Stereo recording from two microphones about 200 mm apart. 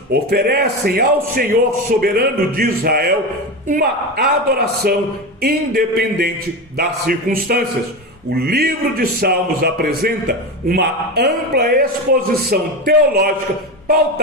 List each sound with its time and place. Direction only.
0.1 s a man's voice: 50° right (ahead or behind)